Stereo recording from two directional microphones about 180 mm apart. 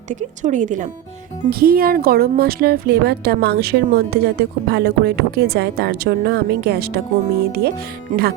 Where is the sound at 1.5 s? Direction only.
55° right (ahead or behind).